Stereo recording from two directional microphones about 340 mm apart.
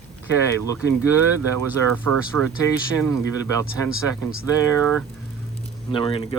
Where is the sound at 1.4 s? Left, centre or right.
Right.